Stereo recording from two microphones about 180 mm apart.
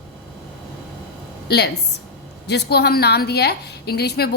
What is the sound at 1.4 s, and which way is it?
A woman's voice, 65° left (ahead or behind).